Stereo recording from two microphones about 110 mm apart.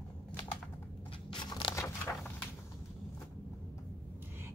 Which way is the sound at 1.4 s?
45° left (ahead or behind).